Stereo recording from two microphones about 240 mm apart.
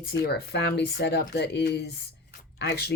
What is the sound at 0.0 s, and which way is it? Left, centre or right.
Speech, left.